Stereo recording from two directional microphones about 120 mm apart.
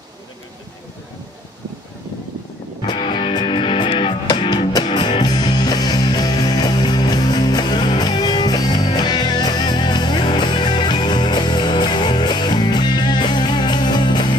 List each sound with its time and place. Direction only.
2.9 s music: 45° left (ahead or behind)